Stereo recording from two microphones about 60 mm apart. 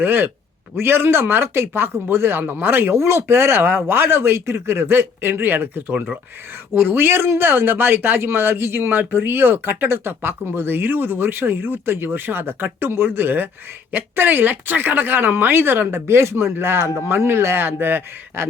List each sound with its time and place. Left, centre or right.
0.0 s speech: right